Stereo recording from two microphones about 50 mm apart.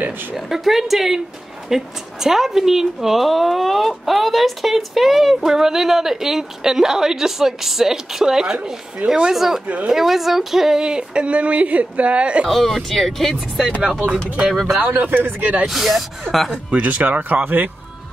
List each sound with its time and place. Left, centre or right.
0.5 s a woman's voice: centre
9.3 s speech: centre
9.7 s speech: right
9.9 s speech: centre; by 12.4 s right
12.4 s speech: centre
14.8 s speech: right
15.6 s speech: centre
16.7 s speech: right